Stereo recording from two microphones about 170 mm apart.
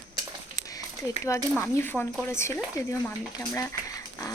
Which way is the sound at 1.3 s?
20° left (ahead or behind).